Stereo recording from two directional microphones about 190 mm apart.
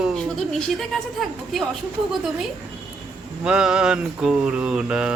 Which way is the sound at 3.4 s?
5° right (ahead or behind).